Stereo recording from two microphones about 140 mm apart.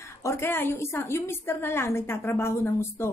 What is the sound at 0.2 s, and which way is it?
A woman's voice, 20° left (ahead or behind).